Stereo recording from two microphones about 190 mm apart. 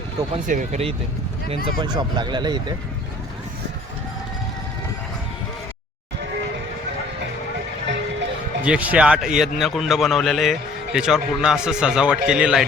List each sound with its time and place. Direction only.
0.4 s speech: 40° right (ahead or behind); by 2.7 s 25° right (ahead or behind)
8.6 s a man's voice: 5° right (ahead or behind)